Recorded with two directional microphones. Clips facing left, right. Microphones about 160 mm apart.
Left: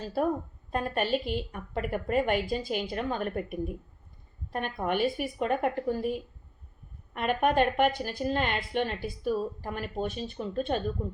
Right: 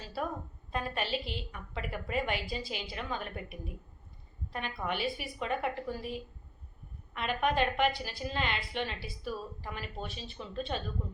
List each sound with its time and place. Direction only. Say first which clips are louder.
0.0 s a woman's voice: left 8 dB; 45° left (ahead or behind)